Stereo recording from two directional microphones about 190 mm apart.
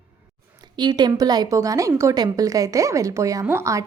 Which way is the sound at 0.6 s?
20° right (ahead or behind).